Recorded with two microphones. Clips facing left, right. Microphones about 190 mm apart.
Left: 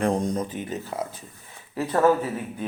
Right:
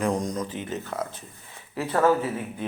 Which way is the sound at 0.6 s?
10° left (ahead or behind).